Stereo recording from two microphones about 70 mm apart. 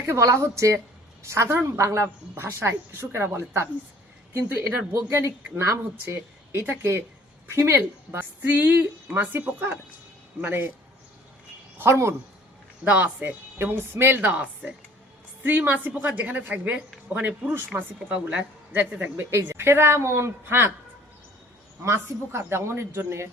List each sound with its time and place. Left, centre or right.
0.2 s speech: right
6.7 s speech: right
8.2 s a woman's voice: right
11.8 s speech: right
12.8 s a woman's voice: right
13.6 s speech: right
14.2 s a woman's voice: right
15.4 s a woman's voice: right
17.7 s speech: right
18.1 s a woman's voice: centre
19.3 s speech: right
21.8 s speech: right